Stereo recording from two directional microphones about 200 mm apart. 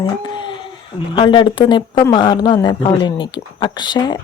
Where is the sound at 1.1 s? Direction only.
25° left (ahead or behind).